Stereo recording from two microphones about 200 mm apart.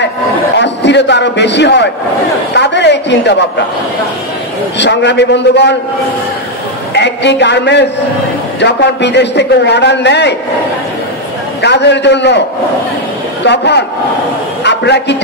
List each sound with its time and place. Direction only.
0.6 s a man's voice: 60° left (ahead or behind)
4.7 s a man's voice: 60° left (ahead or behind)
6.9 s a man's voice: 60° left (ahead or behind)
11.6 s a man's voice: 60° left (ahead or behind)
13.4 s a man's voice: 60° left (ahead or behind)
14.6 s a sound: 60° left (ahead or behind)